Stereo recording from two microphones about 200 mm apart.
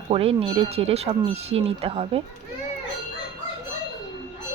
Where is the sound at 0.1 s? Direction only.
30° right (ahead or behind).